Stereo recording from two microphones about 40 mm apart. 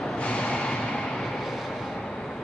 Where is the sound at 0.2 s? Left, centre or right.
Left.